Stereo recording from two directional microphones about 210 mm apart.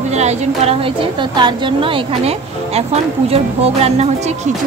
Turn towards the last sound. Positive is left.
turn(degrees=-30)  # may be behind; listen again after turning